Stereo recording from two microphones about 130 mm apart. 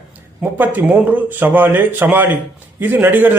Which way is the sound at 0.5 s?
15° right (ahead or behind).